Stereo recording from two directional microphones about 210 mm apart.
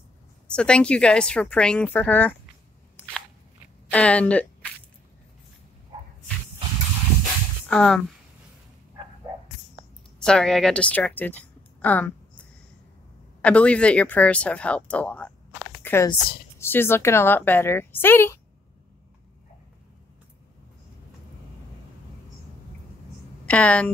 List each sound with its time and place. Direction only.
0.5 s speech: 5° left (ahead or behind)
3.9 s a woman's voice: 5° left (ahead or behind)
7.6 s speech: 5° left (ahead or behind)
9.3 s dog: 15° right (ahead or behind)
10.1 s a woman's voice: 5° left (ahead or behind)
15.8 s a sound: 10° left (ahead or behind)
16.5 s a woman's voice: 10° left (ahead or behind)
23.4 s a woman's voice: 5° left (ahead or behind)